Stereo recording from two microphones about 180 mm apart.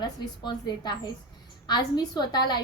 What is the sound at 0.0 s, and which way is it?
A woman's voice, 25° left (ahead or behind).